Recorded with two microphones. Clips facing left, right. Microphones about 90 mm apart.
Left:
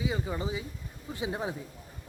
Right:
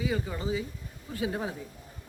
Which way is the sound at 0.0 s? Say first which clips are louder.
Right 1 dB; 20° left (ahead or behind).